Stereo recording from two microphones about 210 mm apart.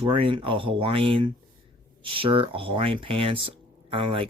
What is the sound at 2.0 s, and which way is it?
Speech, 25° right (ahead or behind).